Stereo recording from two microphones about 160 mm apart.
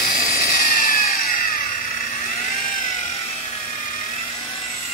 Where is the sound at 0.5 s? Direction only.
65° left (ahead or behind).